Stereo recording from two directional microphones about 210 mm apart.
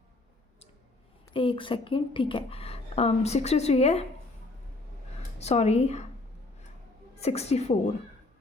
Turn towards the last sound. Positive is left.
turn(degrees=30)  # may be behind; listen again after turning